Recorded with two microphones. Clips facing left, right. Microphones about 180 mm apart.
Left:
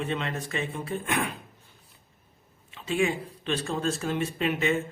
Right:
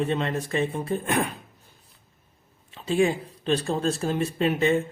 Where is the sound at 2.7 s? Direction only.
35° right (ahead or behind).